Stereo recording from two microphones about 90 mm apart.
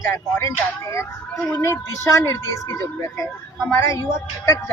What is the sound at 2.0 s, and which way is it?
Speech, 35° left (ahead or behind).